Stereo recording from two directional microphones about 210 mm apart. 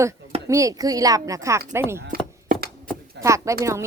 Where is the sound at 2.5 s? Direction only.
40° right (ahead or behind).